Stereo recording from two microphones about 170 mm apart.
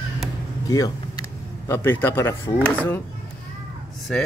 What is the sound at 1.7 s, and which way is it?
Speech, 15° left (ahead or behind).